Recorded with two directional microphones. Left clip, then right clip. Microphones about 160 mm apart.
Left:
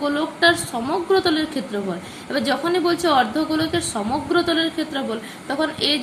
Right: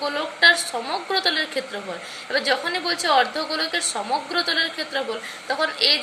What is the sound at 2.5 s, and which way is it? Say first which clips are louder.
A woman's voice: left 5 dB; 5° right (ahead or behind).